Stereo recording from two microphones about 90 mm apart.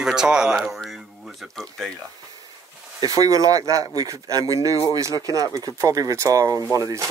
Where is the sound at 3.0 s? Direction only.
45° right (ahead or behind).